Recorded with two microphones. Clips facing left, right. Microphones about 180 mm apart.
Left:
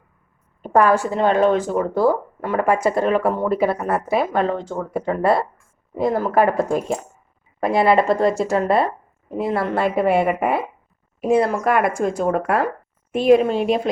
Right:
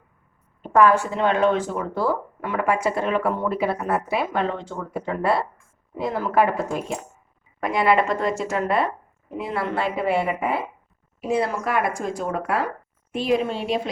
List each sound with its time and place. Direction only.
0.6 s speech: 40° left (ahead or behind)
7.6 s speech: 30° left (ahead or behind); by 13.8 s 50° left (ahead or behind)